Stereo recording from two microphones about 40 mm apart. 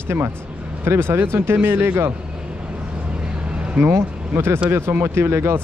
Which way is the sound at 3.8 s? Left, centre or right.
Right.